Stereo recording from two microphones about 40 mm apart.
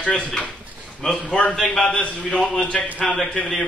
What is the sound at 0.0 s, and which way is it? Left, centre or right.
A man's voice, left.